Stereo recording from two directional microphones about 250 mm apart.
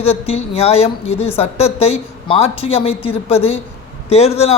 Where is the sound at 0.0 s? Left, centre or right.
Left.